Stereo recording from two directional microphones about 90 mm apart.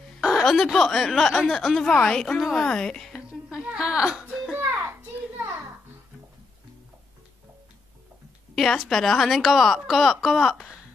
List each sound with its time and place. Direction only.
0.2 s a woman's voice: 5° right (ahead or behind)
3.2 s music: 10° right (ahead or behind)
4.6 s a sound: 20° right (ahead or behind)
8.5 s a woman's voice: 5° left (ahead or behind)